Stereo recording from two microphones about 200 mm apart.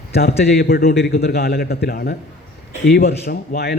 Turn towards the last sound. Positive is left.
turn(degrees=50)  # may be behind; listen again after turning